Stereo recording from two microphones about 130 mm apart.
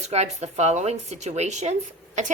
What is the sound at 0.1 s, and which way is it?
A woman's voice, 55° right (ahead or behind).